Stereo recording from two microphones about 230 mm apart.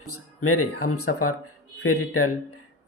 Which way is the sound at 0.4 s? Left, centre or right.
Left.